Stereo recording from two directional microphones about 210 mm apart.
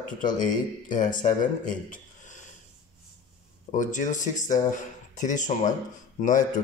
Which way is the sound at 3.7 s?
35° left (ahead or behind).